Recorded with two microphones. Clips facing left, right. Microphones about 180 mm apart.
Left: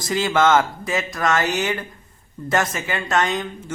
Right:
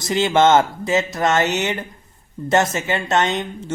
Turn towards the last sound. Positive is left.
turn(degrees=-25)  # may be behind; listen again after turning